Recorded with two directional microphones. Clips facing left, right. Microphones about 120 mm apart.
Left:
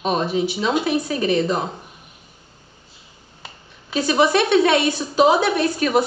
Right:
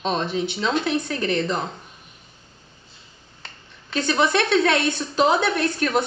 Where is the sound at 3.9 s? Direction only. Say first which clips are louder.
Left 3 dB; 5° left (ahead or behind).